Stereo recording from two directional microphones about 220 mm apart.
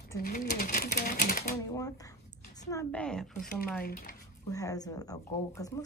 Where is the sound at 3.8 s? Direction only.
40° left (ahead or behind).